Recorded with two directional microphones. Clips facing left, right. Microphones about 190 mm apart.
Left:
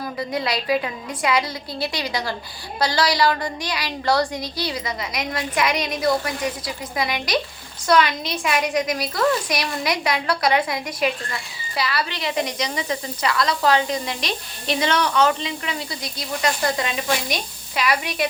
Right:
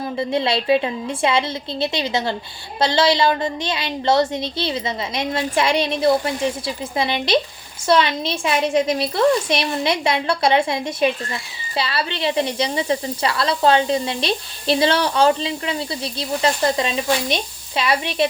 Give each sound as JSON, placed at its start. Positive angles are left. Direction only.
{"t": 0.2, "sound": "speech", "side_deg": -25}